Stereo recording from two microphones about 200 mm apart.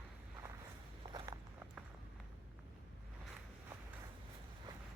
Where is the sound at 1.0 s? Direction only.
20° right (ahead or behind).